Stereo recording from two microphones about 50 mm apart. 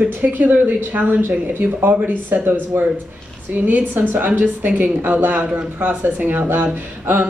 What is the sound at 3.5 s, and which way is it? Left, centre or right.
Speech, right.